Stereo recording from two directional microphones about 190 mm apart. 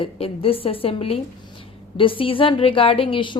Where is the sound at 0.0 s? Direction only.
30° left (ahead or behind).